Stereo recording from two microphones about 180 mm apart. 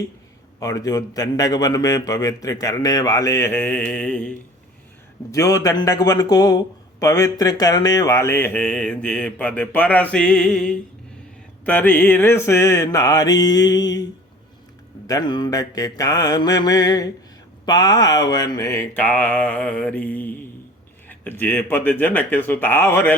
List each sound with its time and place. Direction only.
0.6 s a man's voice: 20° left (ahead or behind)
5.3 s a man's voice: 20° left (ahead or behind)
15.0 s a man's voice: 20° left (ahead or behind)